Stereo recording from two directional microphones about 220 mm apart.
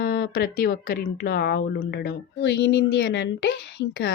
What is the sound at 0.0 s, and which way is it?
Speech, 45° left (ahead or behind).